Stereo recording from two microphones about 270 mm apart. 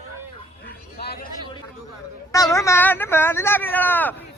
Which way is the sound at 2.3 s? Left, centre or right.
Centre.